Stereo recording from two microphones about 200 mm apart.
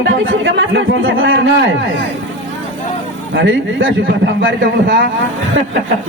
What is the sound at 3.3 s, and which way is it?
Speech, 70° right (ahead or behind).